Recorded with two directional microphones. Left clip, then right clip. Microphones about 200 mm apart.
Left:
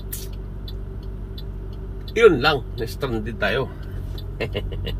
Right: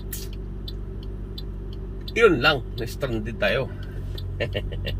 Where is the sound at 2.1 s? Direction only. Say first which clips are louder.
Left 3 dB; 20° right (ahead or behind).